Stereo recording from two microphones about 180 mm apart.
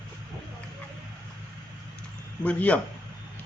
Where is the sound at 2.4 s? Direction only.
5° left (ahead or behind).